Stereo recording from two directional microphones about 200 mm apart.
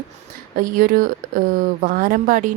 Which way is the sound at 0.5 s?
45° right (ahead or behind).